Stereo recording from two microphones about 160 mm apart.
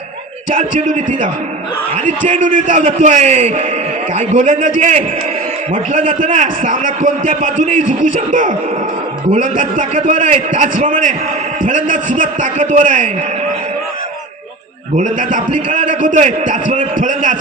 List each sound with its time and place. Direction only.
0.5 s a man's voice: 55° right (ahead or behind)
14.9 s a man's voice: 55° right (ahead or behind)